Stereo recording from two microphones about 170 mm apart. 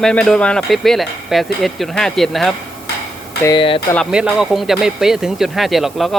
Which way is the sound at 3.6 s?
30° left (ahead or behind).